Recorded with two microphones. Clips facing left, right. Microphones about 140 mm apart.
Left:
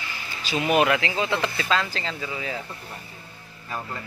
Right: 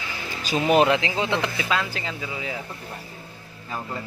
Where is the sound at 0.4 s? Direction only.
45° right (ahead or behind).